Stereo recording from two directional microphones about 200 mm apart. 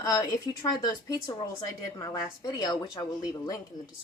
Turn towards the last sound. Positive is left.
turn(degrees=15)  # may be behind; listen again after turning